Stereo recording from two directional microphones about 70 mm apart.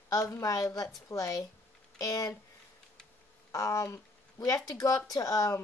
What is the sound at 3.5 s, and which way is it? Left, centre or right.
Speech, left.